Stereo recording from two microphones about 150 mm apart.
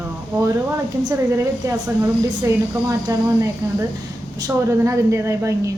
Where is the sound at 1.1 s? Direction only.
20° right (ahead or behind).